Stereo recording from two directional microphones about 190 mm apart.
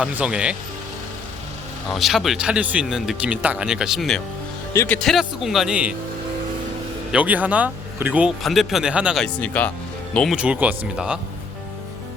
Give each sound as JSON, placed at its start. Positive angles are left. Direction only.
{"t": 0.0, "sound": "speech", "side_deg": -5}
{"t": 1.9, "sound": "speech", "side_deg": 0}
{"t": 4.7, "sound": "speech", "side_deg": 15}
{"t": 4.9, "sound": "speech", "side_deg": 0}
{"t": 7.1, "sound": "speech", "side_deg": -5}
{"t": 9.2, "sound": "speech", "side_deg": 10}
{"t": 10.2, "sound": "speech", "side_deg": 0}